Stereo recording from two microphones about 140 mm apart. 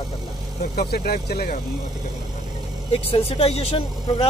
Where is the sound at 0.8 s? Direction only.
90° left.